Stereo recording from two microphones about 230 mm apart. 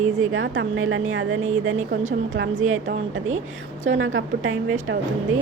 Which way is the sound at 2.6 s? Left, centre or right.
Right.